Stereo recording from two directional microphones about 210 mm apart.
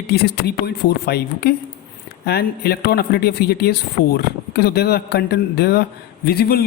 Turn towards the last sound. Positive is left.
turn(degrees=45)  # may be behind; listen again after turning